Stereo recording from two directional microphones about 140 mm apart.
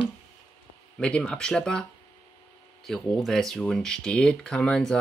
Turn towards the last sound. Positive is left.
turn(degrees=5)  # may be behind; listen again after turning